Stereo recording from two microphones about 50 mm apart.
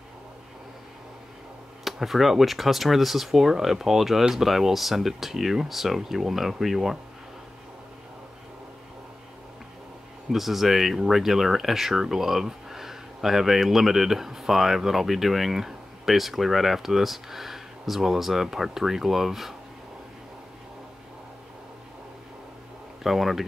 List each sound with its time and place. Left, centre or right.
1.9 s speech: centre
10.3 s speech: centre
23.0 s speech: centre